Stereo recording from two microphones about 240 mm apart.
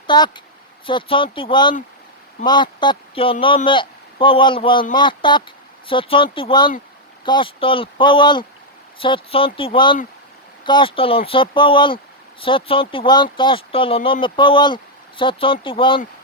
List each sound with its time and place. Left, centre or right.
0.1 s a man's voice: centre